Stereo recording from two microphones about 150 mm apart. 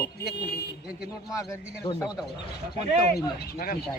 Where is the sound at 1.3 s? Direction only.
20° left (ahead or behind).